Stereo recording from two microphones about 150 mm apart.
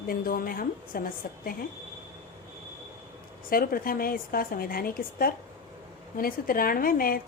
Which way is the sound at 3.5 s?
75° left (ahead or behind).